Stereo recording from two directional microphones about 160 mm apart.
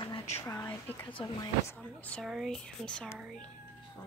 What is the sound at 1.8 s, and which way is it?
Speech, 10° left (ahead or behind).